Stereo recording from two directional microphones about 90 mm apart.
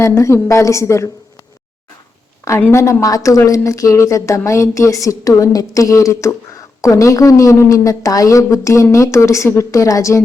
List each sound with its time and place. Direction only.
0.0 s speech: 35° left (ahead or behind)
2.7 s speech: 35° left (ahead or behind)